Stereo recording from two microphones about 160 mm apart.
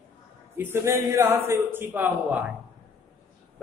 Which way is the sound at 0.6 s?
15° right (ahead or behind).